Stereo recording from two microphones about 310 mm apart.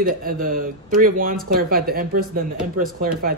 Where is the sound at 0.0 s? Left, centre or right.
Right.